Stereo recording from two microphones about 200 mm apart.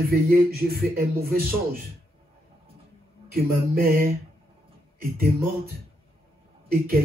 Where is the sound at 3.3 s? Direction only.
50° right (ahead or behind).